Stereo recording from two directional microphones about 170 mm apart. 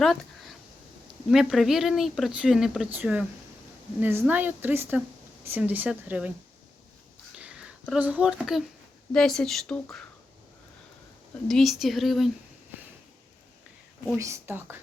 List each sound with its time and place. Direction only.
0.0 s a sound: centre (ahead or behind)
1.3 s speech: centre (ahead or behind)
7.3 s a sound: 5° right (ahead or behind)
7.9 s speech: 10° right (ahead or behind)
11.4 s speech: centre (ahead or behind)
14.2 s speech: 15° right (ahead or behind)